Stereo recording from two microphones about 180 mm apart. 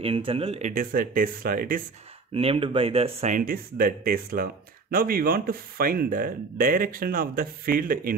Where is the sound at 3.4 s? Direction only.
50° right (ahead or behind).